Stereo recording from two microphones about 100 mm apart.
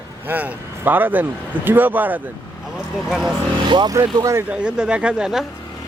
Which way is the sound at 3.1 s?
5° right (ahead or behind).